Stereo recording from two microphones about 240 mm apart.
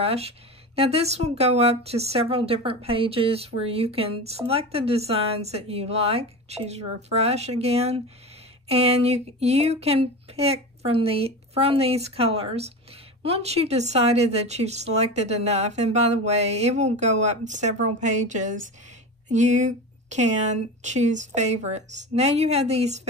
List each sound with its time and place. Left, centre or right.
0.0 s speech: right